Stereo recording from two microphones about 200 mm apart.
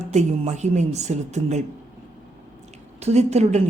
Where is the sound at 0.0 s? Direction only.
35° right (ahead or behind).